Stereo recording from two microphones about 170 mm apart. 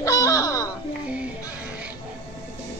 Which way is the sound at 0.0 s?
20° left (ahead or behind).